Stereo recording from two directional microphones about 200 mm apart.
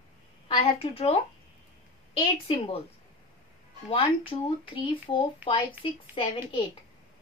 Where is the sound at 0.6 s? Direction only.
30° left (ahead or behind).